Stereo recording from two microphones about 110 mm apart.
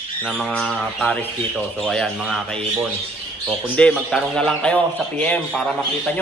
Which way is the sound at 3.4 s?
10° left (ahead or behind).